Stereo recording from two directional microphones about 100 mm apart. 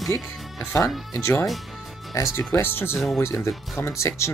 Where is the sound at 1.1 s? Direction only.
25° left (ahead or behind).